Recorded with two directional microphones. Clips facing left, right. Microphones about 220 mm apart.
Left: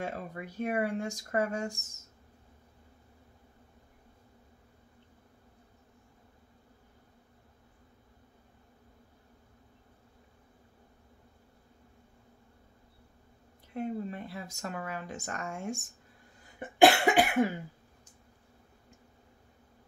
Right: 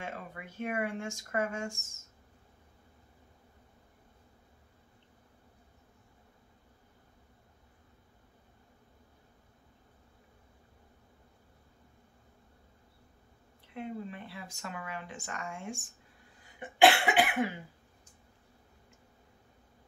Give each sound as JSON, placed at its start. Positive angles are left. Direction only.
{"t": 0.0, "sound": "speech", "side_deg": 40}
{"t": 13.7, "sound": "speech", "side_deg": 40}
{"t": 16.5, "sound": "cough", "side_deg": 45}